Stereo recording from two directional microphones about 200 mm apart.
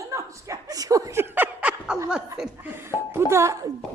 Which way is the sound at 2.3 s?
10° right (ahead or behind).